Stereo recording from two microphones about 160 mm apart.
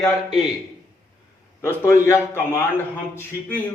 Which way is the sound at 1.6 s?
15° left (ahead or behind).